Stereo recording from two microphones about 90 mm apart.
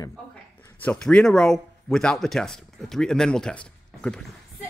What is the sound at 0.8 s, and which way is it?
Speech, 15° left (ahead or behind).